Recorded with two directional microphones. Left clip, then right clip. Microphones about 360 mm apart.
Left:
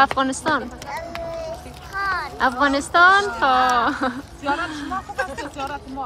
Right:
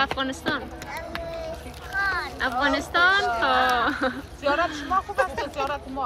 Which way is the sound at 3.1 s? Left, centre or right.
Centre.